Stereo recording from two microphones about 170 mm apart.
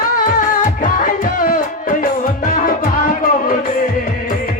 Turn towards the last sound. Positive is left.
turn(degrees=55)  # may be behind; listen again after turning